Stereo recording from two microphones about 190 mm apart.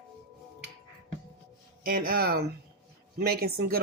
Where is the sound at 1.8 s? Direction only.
50° right (ahead or behind).